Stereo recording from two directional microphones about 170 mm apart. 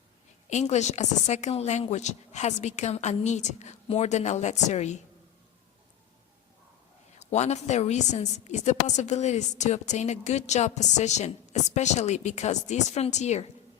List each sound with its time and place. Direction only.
0.5 s speech: 40° left (ahead or behind)
7.2 s a woman's voice: 40° left (ahead or behind)